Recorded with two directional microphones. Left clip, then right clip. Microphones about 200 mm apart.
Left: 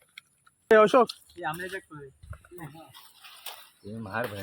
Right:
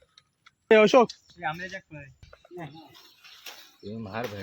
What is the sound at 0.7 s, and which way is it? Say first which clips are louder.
Speech: right 1 dB; 35° right (ahead or behind).